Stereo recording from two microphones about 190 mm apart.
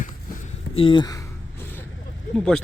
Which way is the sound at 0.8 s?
25° left (ahead or behind).